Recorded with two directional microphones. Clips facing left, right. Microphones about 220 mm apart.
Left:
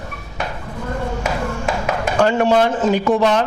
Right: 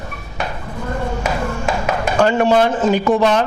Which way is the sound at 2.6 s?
20° right (ahead or behind).